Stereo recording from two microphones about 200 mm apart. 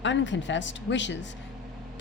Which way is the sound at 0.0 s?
65° left (ahead or behind).